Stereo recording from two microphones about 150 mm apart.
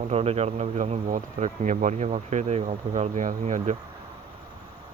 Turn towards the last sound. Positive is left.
turn(degrees=-50)  # may be behind; listen again after turning